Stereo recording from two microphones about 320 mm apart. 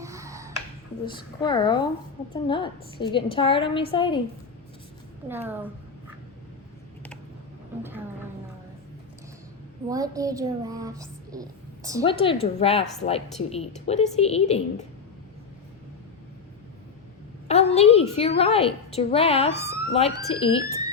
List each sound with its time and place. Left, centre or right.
0.0 s finger snapping: centre
1.0 s a woman's voice: centre
7.8 s speech: centre
9.9 s a child's voice: centre
12.0 s a woman's voice: centre
17.5 s a woman's voice: centre